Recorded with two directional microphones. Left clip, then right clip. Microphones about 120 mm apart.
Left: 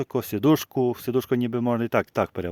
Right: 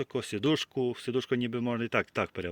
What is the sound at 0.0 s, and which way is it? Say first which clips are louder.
Speech: left 7 dB; 85° left.